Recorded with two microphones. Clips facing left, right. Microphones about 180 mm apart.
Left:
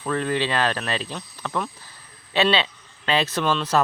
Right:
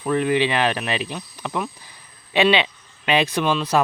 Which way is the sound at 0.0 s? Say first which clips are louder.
Right 4 dB; 15° right (ahead or behind).